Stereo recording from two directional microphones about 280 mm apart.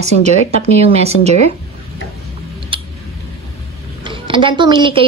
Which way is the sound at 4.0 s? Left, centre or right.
Centre.